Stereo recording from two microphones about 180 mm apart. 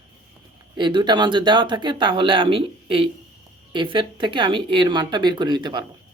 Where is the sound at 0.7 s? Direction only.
25° right (ahead or behind).